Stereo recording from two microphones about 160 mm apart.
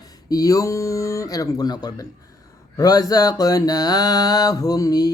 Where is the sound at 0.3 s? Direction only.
20° left (ahead or behind).